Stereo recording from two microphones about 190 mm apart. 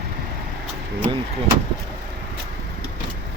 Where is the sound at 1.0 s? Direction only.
25° right (ahead or behind).